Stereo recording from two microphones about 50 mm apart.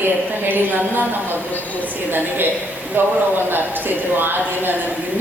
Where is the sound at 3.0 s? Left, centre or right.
Right.